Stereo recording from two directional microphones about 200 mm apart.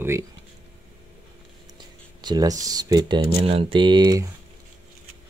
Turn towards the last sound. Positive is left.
turn(degrees=-20)  # may be behind; listen again after turning